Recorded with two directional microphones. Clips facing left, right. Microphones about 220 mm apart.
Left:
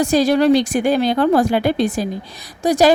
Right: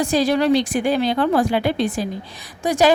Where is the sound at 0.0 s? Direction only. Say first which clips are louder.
Left 4 dB; 40° left (ahead or behind).